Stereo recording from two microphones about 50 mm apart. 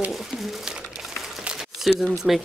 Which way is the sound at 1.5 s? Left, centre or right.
Centre.